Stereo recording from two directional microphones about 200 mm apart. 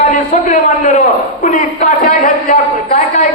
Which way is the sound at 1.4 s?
40° left (ahead or behind).